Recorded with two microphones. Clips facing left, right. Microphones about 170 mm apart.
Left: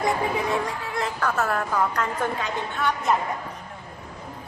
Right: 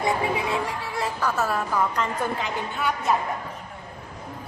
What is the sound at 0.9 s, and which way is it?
Speech, 10° right (ahead or behind).